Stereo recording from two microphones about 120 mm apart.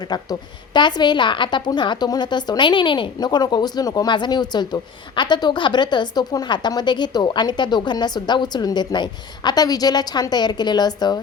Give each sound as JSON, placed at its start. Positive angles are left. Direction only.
{"t": 0.0, "sound": "a woman's voice", "side_deg": 35}